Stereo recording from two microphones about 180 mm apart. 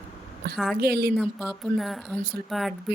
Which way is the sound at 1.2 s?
Centre (ahead or behind).